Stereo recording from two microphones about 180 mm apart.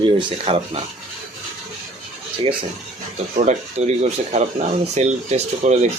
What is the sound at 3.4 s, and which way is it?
Speech, 40° right (ahead or behind).